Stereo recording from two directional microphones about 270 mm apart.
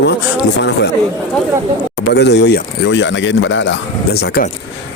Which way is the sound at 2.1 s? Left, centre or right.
Left.